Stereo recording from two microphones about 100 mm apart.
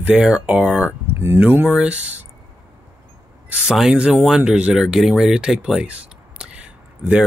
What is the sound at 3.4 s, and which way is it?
Speech, 5° right (ahead or behind).